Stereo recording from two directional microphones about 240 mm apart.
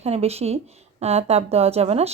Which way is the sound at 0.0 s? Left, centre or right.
Right.